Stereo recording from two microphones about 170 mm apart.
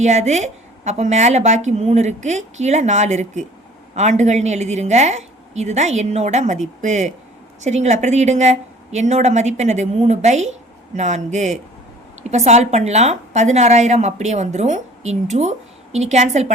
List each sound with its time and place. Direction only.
0.0 s a woman's voice: 45° right (ahead or behind)